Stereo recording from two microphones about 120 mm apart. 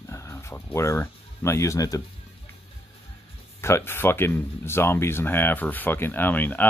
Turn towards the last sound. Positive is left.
turn(degrees=15)  # may be behind; listen again after turning